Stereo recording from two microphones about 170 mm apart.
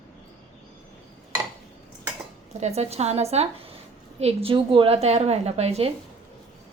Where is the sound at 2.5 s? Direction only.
40° right (ahead or behind).